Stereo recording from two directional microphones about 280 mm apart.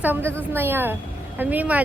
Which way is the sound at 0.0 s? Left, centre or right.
Centre.